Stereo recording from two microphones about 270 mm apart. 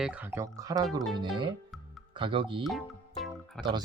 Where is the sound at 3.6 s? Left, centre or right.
Centre.